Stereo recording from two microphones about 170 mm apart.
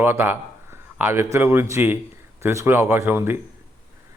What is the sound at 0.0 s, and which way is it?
A man's voice, 15° right (ahead or behind).